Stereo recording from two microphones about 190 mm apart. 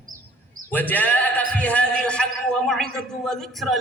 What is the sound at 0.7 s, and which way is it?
A man's voice, 10° left (ahead or behind).